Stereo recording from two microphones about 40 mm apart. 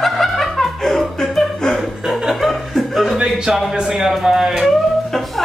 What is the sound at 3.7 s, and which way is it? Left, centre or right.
Speech, centre.